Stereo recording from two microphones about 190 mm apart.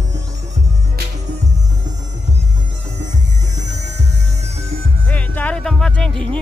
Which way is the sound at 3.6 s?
35° right (ahead or behind).